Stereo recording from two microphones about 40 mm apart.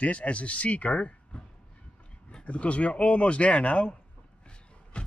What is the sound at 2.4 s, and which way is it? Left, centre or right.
Speech, left.